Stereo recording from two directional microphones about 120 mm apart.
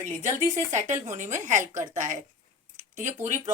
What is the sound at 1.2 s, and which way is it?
Speech, 90° right.